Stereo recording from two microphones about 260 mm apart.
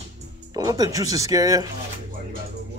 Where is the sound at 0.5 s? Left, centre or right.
Centre.